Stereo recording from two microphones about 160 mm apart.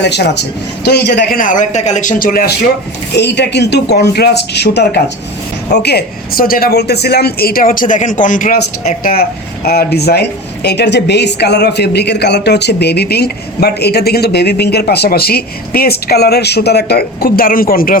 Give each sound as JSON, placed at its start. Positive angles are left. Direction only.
{"t": 0.0, "sound": "a woman's voice", "side_deg": 90}
{"t": 3.2, "sound": "a woman's voice", "side_deg": 90}
{"t": 9.6, "sound": "a woman's voice", "side_deg": 80}